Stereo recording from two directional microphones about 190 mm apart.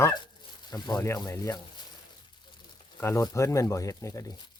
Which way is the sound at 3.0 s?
15° left (ahead or behind).